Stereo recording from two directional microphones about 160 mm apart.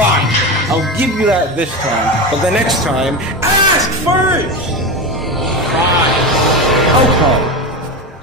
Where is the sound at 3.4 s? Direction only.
15° right (ahead or behind).